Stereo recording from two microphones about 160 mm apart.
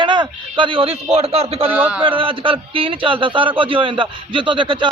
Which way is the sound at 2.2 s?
35° right (ahead or behind).